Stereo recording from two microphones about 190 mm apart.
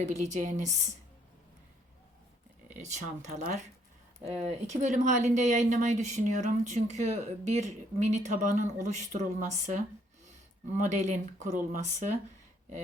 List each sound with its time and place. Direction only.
0.0 s speech: 40° right (ahead or behind)
2.6 s speech: 40° right (ahead or behind)
4.6 s speech: 40° right (ahead or behind)